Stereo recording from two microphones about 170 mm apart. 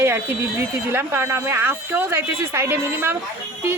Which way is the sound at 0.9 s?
15° right (ahead or behind).